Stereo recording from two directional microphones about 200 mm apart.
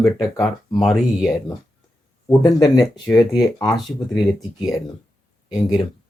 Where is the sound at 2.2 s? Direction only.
20° left (ahead or behind).